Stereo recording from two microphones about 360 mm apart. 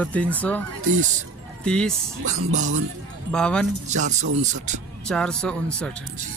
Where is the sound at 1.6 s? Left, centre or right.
Centre.